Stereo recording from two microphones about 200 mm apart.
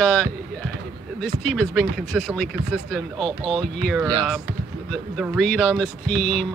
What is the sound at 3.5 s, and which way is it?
Speech, 5° left (ahead or behind).